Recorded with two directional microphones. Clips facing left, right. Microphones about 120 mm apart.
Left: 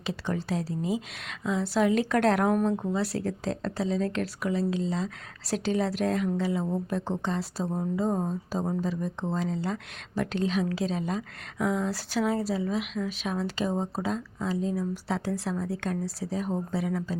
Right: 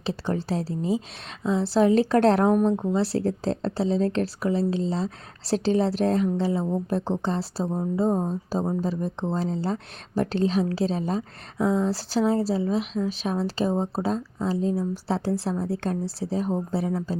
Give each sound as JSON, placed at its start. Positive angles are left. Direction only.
{"t": 0.0, "sound": "speech", "side_deg": -30}
{"t": 8.8, "sound": "speech", "side_deg": -35}